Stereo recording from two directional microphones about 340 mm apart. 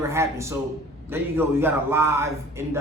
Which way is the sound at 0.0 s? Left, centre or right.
Centre.